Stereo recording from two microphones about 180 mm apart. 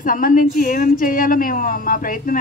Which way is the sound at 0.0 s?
50° left (ahead or behind).